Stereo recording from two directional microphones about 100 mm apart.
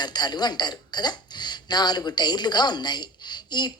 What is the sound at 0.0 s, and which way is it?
Speech, 45° left (ahead or behind).